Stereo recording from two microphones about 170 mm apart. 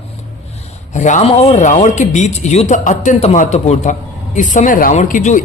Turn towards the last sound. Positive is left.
turn(degrees=50)  # may be behind; listen again after turning